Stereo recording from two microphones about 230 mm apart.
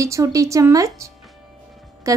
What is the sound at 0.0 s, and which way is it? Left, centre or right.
A woman's voice, centre.